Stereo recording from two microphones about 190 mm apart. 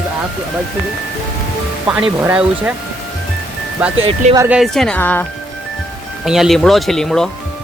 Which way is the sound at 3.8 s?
5° right (ahead or behind).